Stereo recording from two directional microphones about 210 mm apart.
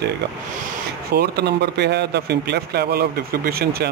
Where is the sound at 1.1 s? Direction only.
50° right (ahead or behind).